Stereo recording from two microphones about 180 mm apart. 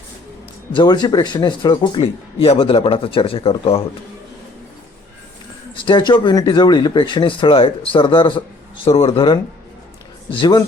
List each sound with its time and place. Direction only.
0.7 s speech: 25° left (ahead or behind)
5.7 s speech: 25° left (ahead or behind)